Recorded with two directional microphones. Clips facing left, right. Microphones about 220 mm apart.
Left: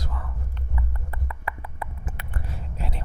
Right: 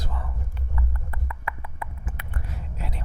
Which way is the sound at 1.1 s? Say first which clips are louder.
Left 1 dB; 30° left (ahead or behind).